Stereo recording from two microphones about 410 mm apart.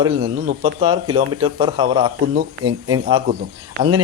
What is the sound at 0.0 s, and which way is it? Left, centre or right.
A man's voice, centre.